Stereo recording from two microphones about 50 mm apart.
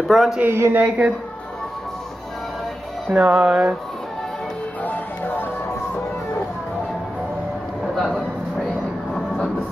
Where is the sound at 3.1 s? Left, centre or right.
Right.